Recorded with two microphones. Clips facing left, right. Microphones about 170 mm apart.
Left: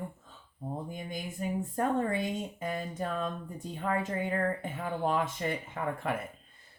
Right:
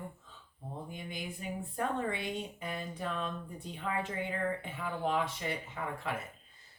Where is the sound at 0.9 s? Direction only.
45° left (ahead or behind).